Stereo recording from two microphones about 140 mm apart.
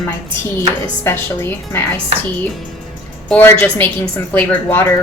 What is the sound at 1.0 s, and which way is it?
Speech, 15° left (ahead or behind).